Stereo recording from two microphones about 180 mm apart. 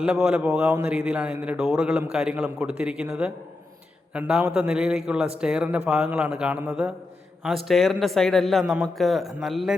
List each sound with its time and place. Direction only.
0.0 s speech: 5° right (ahead or behind)